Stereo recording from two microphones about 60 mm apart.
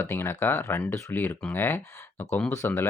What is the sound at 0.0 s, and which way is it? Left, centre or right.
Speech, left.